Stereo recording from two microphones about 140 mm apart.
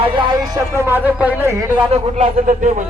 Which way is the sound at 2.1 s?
65° right (ahead or behind).